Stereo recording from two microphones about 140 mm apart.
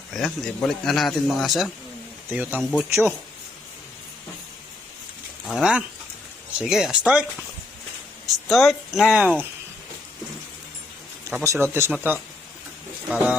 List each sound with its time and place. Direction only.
0.1 s a man's voice: 5° left (ahead or behind)
2.3 s speech: 10° right (ahead or behind)
5.5 s a man's voice: 5° right (ahead or behind)
8.4 s a man's voice: centre (ahead or behind)
11.3 s speech: 20° right (ahead or behind)